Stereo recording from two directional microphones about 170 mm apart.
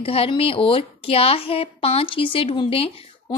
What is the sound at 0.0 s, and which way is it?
A woman's voice, 35° left (ahead or behind).